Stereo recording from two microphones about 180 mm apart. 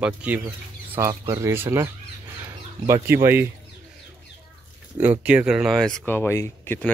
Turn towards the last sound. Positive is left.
turn(degrees=10)  # may be behind; listen again after turning